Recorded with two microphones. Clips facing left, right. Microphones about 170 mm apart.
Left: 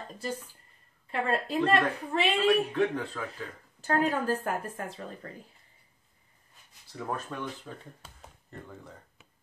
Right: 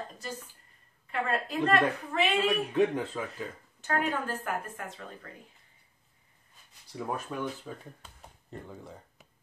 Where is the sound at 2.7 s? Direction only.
15° right (ahead or behind).